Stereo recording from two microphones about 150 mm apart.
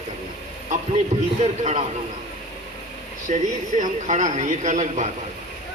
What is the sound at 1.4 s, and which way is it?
Speech, 50° right (ahead or behind).